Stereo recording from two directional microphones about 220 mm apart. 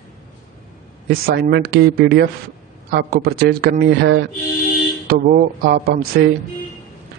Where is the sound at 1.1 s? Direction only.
45° right (ahead or behind).